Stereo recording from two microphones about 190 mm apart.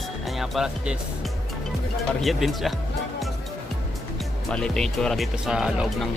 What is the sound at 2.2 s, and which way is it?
Speech, centre (ahead or behind).